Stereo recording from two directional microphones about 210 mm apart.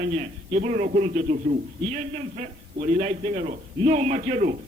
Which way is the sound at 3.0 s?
35° right (ahead or behind).